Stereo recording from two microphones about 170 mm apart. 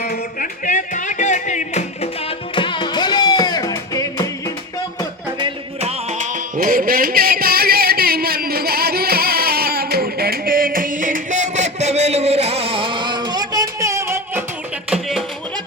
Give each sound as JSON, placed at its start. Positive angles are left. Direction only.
{"t": 0.0, "sound": "music", "side_deg": 55}
{"t": 2.6, "sound": "music", "side_deg": 30}
{"t": 5.4, "sound": "music", "side_deg": -40}
{"t": 6.6, "sound": "a sound", "side_deg": -55}
{"t": 14.8, "sound": "music", "side_deg": -5}